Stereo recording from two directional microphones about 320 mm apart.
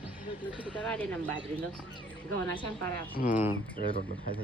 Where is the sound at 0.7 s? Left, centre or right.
Centre.